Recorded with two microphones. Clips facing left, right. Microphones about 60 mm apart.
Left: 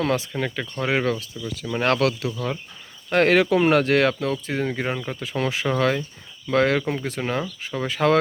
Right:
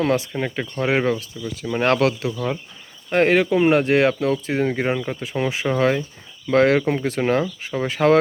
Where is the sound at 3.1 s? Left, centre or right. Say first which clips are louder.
Right 1 dB; centre.